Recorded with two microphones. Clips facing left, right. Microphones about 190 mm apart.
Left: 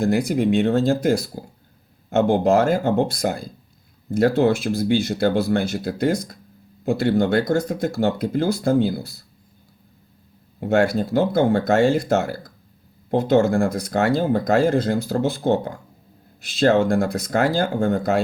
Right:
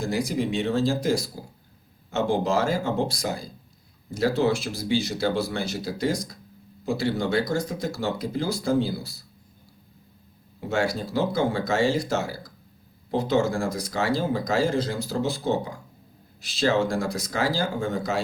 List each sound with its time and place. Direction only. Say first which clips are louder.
0.0 s speech: left 7 dB; 60° left (ahead or behind)
10.6 s speech: left 7 dB; 55° left (ahead or behind)